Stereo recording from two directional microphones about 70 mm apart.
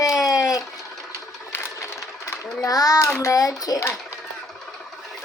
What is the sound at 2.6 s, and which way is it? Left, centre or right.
A child's voice, left.